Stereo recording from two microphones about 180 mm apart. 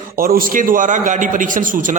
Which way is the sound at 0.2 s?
55° right (ahead or behind).